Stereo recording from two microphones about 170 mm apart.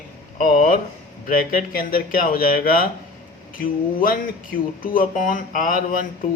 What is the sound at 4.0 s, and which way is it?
Speech, 55° left (ahead or behind).